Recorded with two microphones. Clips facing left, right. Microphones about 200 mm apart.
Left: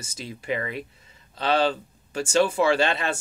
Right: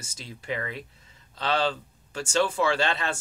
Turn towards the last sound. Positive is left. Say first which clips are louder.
# left 4 dB
turn(degrees=15)  # may be behind; listen again after turning